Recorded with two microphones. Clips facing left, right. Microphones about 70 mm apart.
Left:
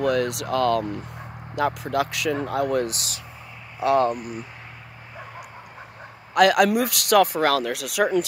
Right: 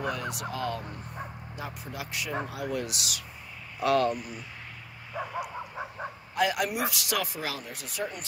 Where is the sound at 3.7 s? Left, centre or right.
Left.